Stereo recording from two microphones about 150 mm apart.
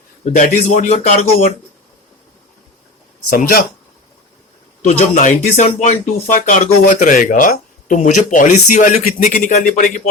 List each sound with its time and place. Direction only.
0.3 s speech: 45° left (ahead or behind)
3.2 s speech: 70° left (ahead or behind)
4.8 s speech: 50° left (ahead or behind)